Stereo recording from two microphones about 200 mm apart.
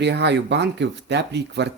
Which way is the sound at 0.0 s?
60° right (ahead or behind).